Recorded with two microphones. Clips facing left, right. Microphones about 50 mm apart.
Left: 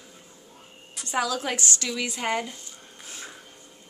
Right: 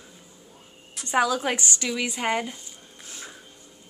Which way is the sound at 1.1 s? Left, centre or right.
Right.